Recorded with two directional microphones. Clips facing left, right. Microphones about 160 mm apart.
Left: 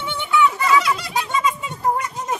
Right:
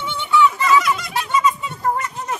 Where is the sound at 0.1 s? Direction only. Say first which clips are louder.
Right 2 dB; 15° left (ahead or behind).